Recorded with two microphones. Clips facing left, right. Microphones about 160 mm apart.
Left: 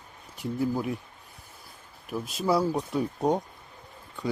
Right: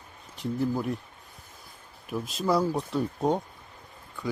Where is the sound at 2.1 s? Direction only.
5° left (ahead or behind).